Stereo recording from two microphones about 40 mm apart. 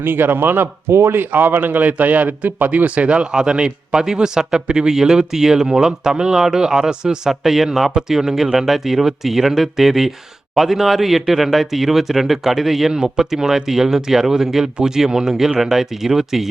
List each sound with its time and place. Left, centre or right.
0.0 s speech: right
1.3 s a man's voice: right
3.2 s a man's voice: right
7.4 s speech: centre
12.9 s speech: centre